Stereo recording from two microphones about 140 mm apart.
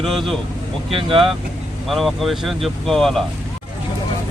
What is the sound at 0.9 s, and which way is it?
Speech, 40° right (ahead or behind).